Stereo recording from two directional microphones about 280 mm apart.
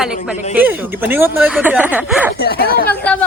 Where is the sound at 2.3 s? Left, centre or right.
Left.